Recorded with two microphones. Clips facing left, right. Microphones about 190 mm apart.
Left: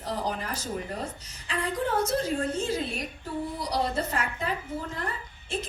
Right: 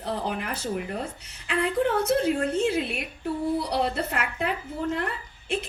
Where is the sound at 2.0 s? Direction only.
65° right (ahead or behind).